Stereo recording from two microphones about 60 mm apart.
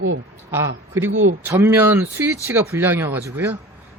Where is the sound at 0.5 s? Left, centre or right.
Right.